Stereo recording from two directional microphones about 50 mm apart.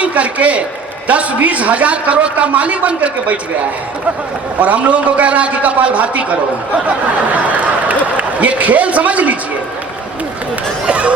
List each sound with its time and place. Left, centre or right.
0.0 s a man's voice: right
4.6 s a man's voice: right
8.1 s a man's voice: right
10.8 s a sound: right